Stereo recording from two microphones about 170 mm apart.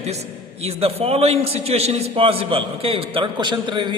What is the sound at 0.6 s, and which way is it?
A man's voice, 35° right (ahead or behind).